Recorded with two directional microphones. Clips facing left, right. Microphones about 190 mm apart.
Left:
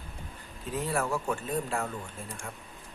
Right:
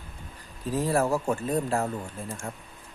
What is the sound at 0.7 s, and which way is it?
Speech, 35° right (ahead or behind).